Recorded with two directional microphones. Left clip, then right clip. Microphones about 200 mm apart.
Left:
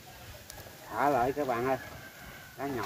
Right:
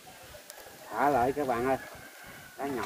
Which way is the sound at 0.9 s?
20° left (ahead or behind).